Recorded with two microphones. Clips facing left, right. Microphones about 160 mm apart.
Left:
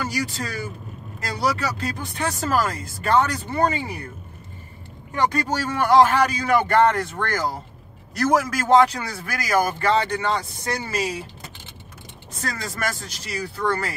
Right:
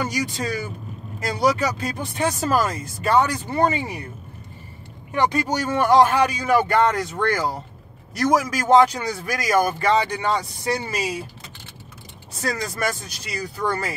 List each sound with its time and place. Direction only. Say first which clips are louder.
0.0 s a man's voice: right 2 dB; 15° right (ahead or behind)
5.7 s a man's voice: even; 20° right (ahead or behind)
12.4 s a man's voice: right 3 dB; 15° right (ahead or behind)